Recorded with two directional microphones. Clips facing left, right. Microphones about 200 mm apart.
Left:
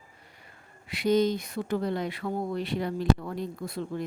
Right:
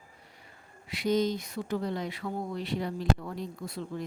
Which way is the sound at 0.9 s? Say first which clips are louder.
Left 3 dB; 60° left (ahead or behind).